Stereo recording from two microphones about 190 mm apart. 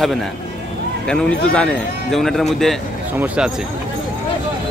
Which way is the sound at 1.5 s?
5° left (ahead or behind).